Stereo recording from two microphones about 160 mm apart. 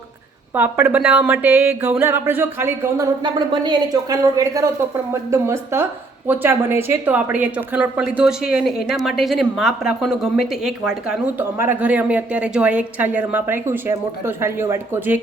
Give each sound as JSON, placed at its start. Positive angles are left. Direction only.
{"t": 0.5, "sound": "a woman's voice", "side_deg": -10}
{"t": 3.3, "sound": "a woman's voice", "side_deg": -30}
{"t": 11.5, "sound": "a woman's voice", "side_deg": -15}